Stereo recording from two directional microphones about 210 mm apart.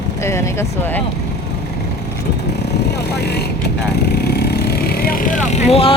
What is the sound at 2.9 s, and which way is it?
Speech, 50° left (ahead or behind).